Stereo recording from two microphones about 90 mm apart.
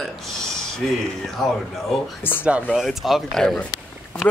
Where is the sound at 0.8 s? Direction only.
Centre (ahead or behind).